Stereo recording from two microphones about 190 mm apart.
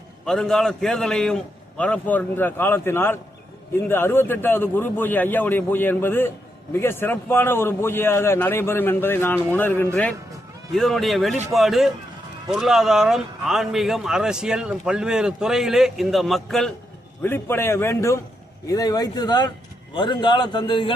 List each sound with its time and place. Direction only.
0.3 s a man's voice: 5° left (ahead or behind)
17.2 s a man's voice: 10° left (ahead or behind)